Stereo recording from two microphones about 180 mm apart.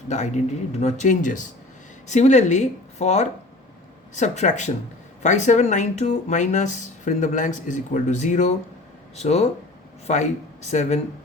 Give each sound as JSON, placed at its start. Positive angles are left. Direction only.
{"t": 0.1, "sound": "speech", "side_deg": 40}